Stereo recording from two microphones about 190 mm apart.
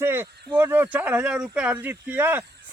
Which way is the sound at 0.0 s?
10° right (ahead or behind).